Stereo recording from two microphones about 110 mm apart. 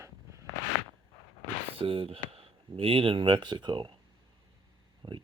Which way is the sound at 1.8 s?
55° right (ahead or behind).